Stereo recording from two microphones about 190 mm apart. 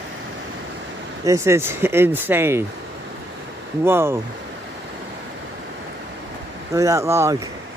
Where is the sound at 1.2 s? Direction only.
15° right (ahead or behind).